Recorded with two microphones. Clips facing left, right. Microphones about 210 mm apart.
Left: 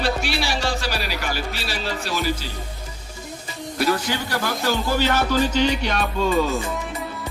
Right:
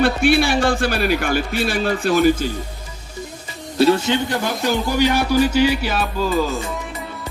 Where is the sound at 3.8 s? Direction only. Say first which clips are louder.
Right 7 dB; 25° right (ahead or behind).